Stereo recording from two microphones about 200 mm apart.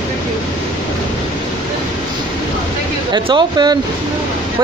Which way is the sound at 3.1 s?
20° right (ahead or behind).